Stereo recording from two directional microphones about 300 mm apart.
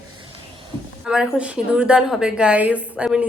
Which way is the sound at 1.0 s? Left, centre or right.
Centre.